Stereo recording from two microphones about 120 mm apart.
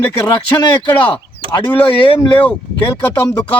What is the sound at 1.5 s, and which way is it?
Speech, 45° left (ahead or behind).